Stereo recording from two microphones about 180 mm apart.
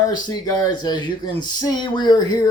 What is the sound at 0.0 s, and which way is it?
Speech, 20° left (ahead or behind).